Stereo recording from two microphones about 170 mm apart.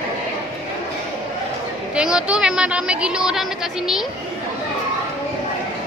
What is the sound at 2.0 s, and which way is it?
A woman's voice, 5° right (ahead or behind).